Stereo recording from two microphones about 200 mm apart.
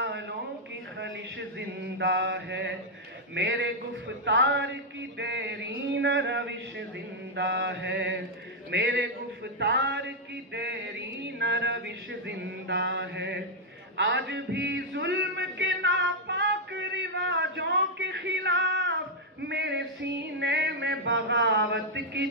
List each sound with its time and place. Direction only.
1.6 s mantra: 60° right (ahead or behind)
3.3 s speech: 65° right (ahead or behind)
9.6 s music: 55° right (ahead or behind)
10.5 s male singing: 60° right (ahead or behind)
13.9 s a sound: 65° right (ahead or behind)
19.4 s music: 60° right (ahead or behind)